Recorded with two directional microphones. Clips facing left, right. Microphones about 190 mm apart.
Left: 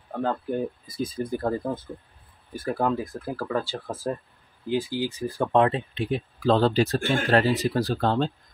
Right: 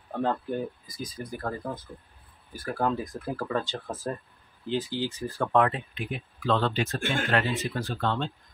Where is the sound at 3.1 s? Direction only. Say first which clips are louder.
Left 2 dB; centre (ahead or behind).